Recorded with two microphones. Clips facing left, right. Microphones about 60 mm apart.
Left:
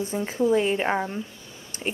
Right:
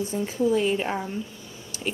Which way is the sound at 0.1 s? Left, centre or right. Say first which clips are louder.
Left 2 dB; left.